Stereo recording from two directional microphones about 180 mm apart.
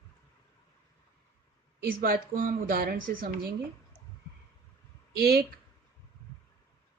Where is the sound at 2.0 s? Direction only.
50° right (ahead or behind).